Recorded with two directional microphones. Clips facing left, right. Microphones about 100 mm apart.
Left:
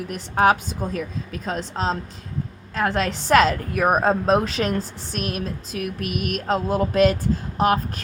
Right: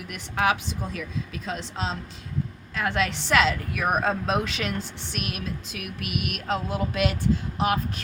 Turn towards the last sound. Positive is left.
turn(degrees=40)  # may be behind; listen again after turning